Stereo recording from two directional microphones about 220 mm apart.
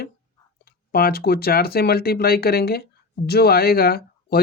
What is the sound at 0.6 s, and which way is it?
Speech, 45° left (ahead or behind).